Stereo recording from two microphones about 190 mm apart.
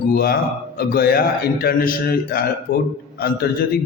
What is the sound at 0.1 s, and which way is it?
A man's voice, 55° left (ahead or behind).